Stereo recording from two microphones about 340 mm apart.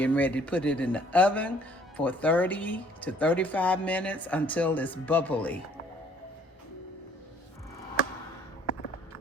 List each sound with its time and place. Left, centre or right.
0.0 s speech: centre